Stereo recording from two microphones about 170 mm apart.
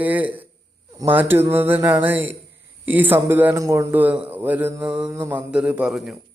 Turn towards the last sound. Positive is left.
turn(degrees=0)  # may be behind; listen again after turning